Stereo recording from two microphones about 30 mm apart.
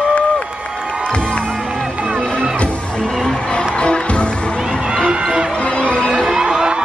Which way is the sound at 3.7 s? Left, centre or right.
Left.